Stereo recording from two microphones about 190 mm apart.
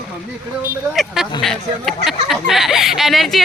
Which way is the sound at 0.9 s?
Centre (ahead or behind).